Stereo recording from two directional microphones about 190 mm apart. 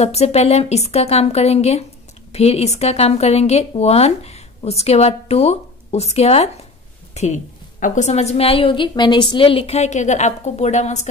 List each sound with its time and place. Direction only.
0.0 s speech: 35° left (ahead or behind)